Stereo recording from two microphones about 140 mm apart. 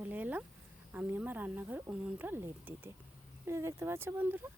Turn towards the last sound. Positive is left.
turn(degrees=-15)  # may be behind; listen again after turning